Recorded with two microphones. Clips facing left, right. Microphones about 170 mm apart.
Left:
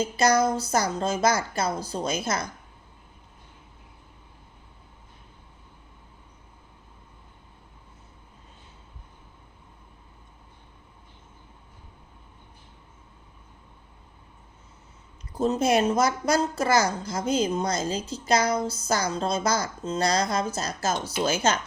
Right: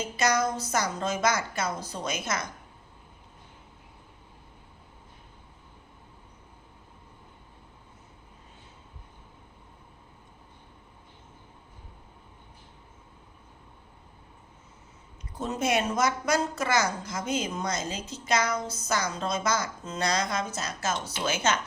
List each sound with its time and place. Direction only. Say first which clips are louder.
0.0 s a woman's voice: left 5 dB; 35° left (ahead or behind)
15.4 s a woman's voice: left 5 dB; 30° left (ahead or behind)